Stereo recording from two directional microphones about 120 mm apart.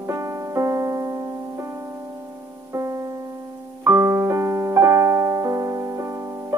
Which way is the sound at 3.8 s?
25° right (ahead or behind).